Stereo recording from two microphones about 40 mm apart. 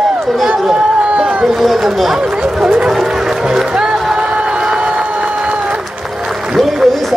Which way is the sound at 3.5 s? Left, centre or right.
Centre.